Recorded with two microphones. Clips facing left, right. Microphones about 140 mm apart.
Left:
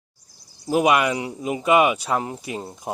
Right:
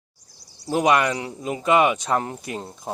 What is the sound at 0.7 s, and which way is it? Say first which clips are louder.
Speech: left 1 dB; 10° left (ahead or behind).